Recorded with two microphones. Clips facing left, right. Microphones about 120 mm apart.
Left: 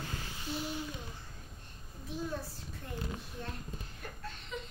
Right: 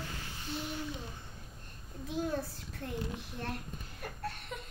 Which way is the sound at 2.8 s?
65° right (ahead or behind).